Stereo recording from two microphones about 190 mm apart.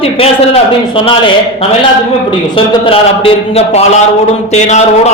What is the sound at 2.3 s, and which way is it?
A man's voice, 30° left (ahead or behind).